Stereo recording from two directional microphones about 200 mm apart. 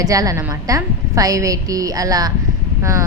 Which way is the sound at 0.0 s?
15° right (ahead or behind).